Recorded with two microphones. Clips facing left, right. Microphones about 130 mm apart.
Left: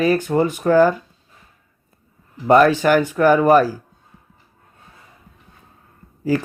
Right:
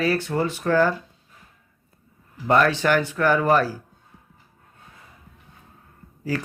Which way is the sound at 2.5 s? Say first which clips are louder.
Left 6 dB; 15° left (ahead or behind).